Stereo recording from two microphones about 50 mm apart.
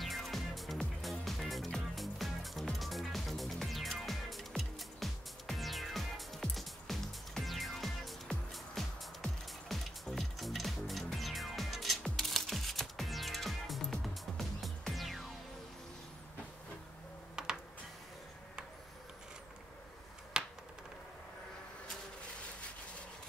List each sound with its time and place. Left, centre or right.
0.0 s music: centre
11.1 s shuffling cards: centre
15.0 s music: centre
17.4 s computer keyboard: centre
20.4 s finger snapping: centre